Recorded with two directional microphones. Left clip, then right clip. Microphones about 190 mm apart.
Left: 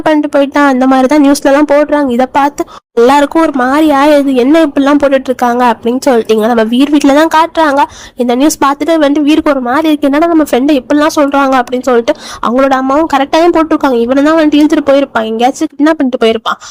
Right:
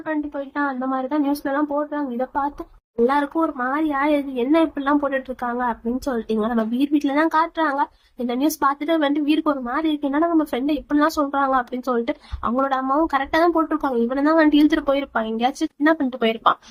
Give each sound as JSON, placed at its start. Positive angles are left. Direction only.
{"t": 0.0, "sound": "a woman's voice", "side_deg": 60}